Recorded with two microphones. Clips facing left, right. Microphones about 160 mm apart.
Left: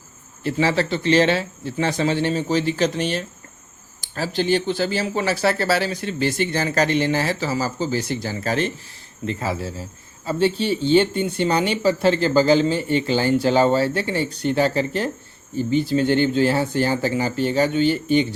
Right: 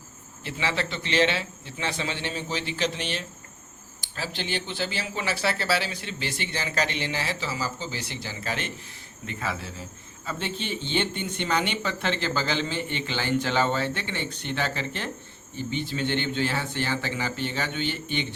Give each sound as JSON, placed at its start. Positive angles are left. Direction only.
{"t": 0.4, "sound": "speech", "side_deg": 40}